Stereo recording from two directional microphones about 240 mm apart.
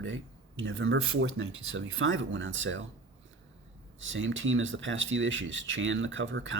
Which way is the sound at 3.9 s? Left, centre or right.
Right.